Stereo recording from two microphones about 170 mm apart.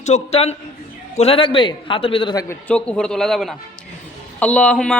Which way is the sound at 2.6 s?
5° left (ahead or behind).